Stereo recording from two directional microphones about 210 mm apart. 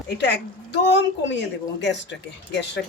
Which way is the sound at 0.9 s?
55° left (ahead or behind).